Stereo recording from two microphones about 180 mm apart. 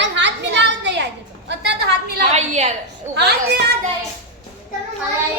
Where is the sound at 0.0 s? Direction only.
85° right.